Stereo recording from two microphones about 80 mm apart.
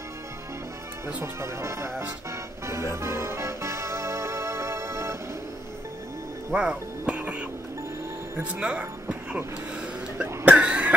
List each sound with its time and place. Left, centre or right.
1.0 s speech: right
2.6 s music: right
6.5 s speech: centre
10.4 s cough: centre